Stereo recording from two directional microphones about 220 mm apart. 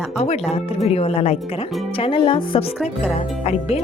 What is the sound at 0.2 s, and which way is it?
Speech, 30° left (ahead or behind).